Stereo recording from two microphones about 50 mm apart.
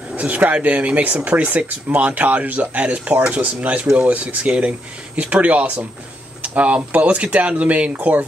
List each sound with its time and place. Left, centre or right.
0.1 s speech: right